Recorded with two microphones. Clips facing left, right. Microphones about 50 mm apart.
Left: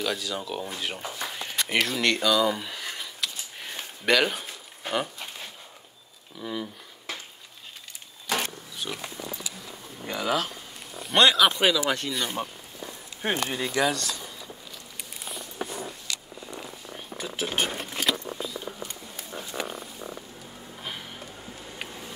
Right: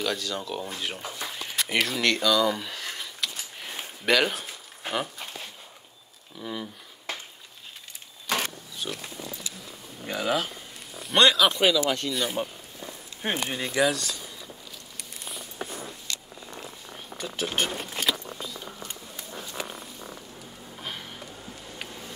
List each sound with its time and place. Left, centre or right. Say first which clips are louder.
0.0 s a sound: even; centre
6.4 s speech: left 2 dB; centre
8.9 s speech: left 2 dB; centre
10.0 s speech: even; centre
11.8 s speech: even; centre
12.1 s speech: right 2 dB; centre
12.8 s walk: left 1 dB; centre
13.2 s speech: left 2 dB; centre
15.0 s a sound: left 1 dB; centre
16.5 s purr: left 1 dB; centre
20.7 s a sound: even; centre